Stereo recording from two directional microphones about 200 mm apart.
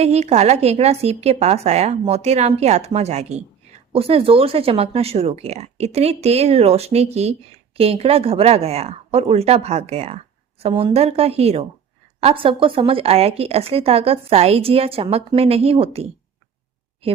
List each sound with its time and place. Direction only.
0.0 s speech: 30° right (ahead or behind)